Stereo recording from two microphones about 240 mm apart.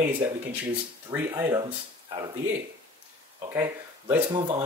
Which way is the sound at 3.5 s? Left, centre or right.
Centre.